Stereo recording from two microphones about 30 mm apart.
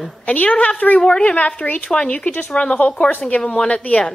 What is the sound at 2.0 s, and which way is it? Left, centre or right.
Speech, left.